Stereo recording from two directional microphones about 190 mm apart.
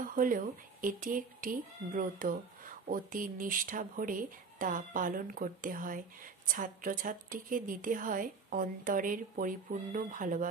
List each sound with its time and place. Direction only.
0.0 s speech: 45° right (ahead or behind)